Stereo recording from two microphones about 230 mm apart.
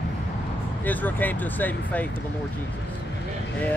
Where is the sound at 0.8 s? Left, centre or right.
Centre.